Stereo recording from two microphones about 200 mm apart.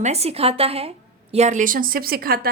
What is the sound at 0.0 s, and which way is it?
A woman's voice, 30° right (ahead or behind).